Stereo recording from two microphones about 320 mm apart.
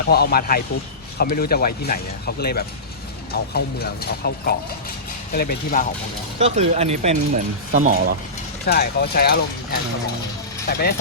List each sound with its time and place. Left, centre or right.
0.1 s speech: left
6.4 s speech: centre
8.6 s speech: left